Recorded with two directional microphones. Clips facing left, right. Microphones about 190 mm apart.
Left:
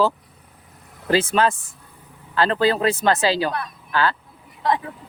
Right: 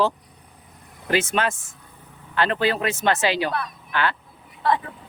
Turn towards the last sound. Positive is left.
turn(degrees=15)  # may be behind; listen again after turning